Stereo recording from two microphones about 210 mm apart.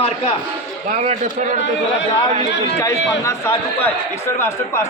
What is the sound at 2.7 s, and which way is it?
A man's voice, 15° left (ahead or behind).